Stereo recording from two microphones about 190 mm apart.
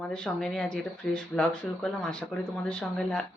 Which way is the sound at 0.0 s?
5° left (ahead or behind).